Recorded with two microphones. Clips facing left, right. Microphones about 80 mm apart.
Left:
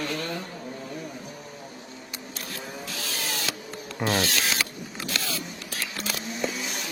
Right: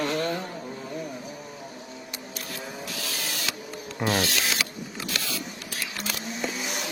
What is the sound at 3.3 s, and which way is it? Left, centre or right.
Printer, left.